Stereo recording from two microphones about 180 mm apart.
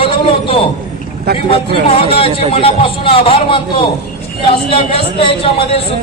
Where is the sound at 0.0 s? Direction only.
30° left (ahead or behind).